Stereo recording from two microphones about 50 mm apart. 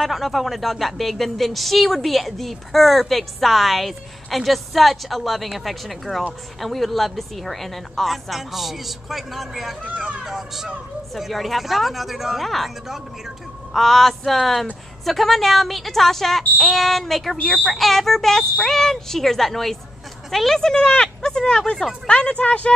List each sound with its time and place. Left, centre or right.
0.0 s a woman's voice: centre
9.8 s speech: right
10.2 s a woman's voice: centre
22.3 s speech: left